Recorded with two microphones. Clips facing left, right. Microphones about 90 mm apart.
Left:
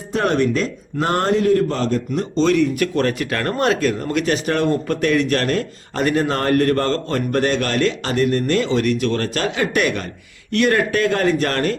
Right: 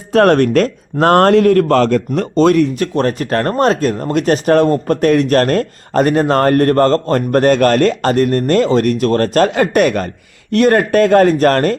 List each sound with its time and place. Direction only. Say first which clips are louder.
0.1 s a man's voice: right 8 dB; 65° right (ahead or behind)
2.7 s speech: right 3 dB; 35° right (ahead or behind)